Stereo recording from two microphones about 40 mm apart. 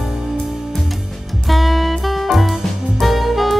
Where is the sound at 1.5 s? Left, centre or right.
Centre.